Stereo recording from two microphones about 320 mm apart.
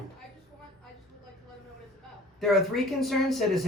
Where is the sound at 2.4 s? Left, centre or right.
Centre.